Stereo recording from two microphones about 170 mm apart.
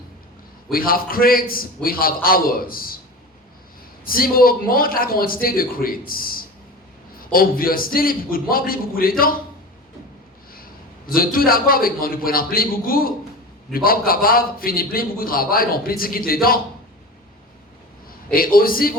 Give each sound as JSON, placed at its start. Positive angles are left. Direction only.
{"t": 0.7, "sound": "a man's voice", "side_deg": 60}
{"t": 4.0, "sound": "a man's voice", "side_deg": 60}
{"t": 11.0, "sound": "a man's voice", "side_deg": 60}
{"t": 18.3, "sound": "a man's voice", "side_deg": 60}